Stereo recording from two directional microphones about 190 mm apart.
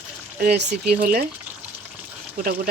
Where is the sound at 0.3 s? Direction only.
55° right (ahead or behind).